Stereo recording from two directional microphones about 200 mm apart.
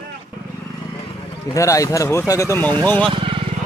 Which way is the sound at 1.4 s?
15° left (ahead or behind).